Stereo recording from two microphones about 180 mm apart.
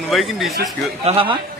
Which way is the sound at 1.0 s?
30° right (ahead or behind).